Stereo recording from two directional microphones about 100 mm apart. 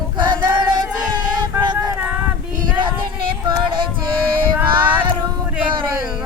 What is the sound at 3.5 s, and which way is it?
Music, 55° right (ahead or behind).